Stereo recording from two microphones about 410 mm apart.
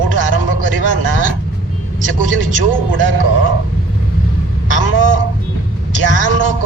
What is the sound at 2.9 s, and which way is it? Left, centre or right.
Speech, right.